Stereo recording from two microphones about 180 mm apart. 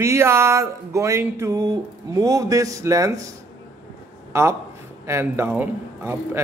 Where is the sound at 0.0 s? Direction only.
15° right (ahead or behind).